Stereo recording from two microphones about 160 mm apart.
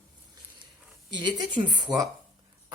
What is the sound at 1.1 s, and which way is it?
Speech, 25° right (ahead or behind).